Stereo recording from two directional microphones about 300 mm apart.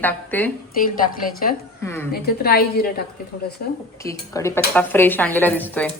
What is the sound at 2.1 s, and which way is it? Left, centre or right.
Speech, left.